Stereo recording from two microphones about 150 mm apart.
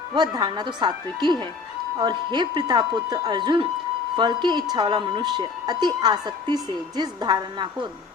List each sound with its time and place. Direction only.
0.1 s a woman's voice: 30° right (ahead or behind)